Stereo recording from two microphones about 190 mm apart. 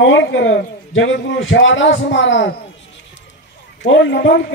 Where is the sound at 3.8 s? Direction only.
70° left (ahead or behind).